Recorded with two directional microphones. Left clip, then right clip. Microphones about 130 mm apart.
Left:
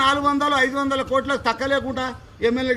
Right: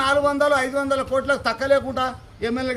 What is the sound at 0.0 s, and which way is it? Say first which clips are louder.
A man's voice: even; 30° right (ahead or behind).